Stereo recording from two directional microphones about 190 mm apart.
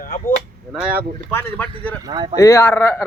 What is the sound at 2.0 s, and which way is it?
Speech, 20° right (ahead or behind).